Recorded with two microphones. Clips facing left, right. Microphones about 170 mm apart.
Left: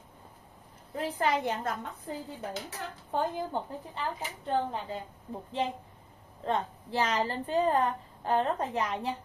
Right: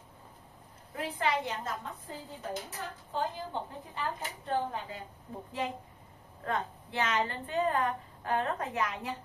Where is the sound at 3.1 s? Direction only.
55° left (ahead or behind).